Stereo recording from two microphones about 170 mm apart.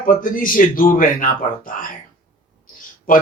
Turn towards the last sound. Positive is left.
turn(degrees=55)  # may be behind; listen again after turning